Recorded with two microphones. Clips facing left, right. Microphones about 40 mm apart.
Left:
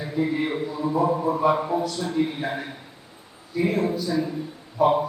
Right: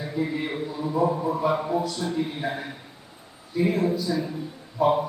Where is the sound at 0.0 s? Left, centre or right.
Centre.